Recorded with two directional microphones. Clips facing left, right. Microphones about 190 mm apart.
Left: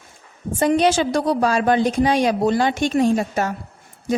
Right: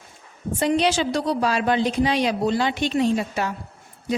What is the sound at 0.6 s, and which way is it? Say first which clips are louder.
A woman's voice: left 4 dB; 50° left (ahead or behind).